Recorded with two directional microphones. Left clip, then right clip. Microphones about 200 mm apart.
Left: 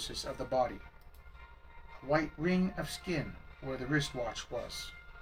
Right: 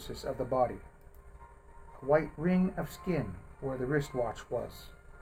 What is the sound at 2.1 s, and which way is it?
Speech, 45° right (ahead or behind).